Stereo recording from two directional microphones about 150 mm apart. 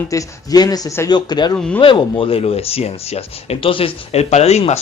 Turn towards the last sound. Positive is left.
turn(degrees=45)  # may be behind; listen again after turning